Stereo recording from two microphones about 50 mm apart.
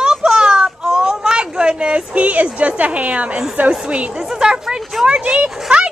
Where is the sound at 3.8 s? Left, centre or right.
Centre.